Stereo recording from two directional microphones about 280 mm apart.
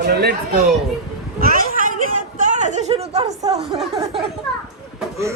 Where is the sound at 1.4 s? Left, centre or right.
Right.